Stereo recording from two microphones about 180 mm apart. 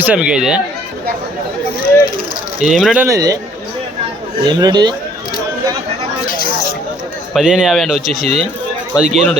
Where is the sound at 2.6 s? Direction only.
Centre (ahead or behind).